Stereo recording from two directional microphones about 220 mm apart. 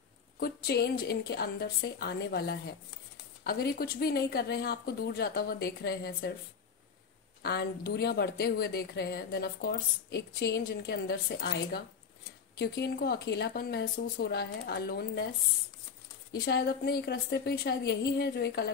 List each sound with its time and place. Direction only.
0.4 s speech: 45° left (ahead or behind)
7.4 s speech: 45° left (ahead or behind)
16.3 s speech: 45° left (ahead or behind)